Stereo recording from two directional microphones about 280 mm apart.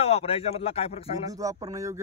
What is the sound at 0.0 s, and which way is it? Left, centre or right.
Speech, left.